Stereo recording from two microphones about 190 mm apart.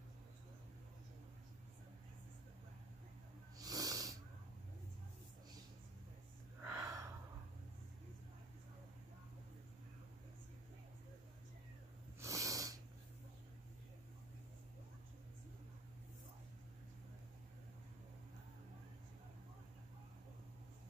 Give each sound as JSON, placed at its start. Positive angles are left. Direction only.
{"t": 3.5, "sound": "snoring", "side_deg": -20}
{"t": 6.6, "sound": "a sound", "side_deg": -15}
{"t": 12.2, "sound": "snort", "side_deg": -15}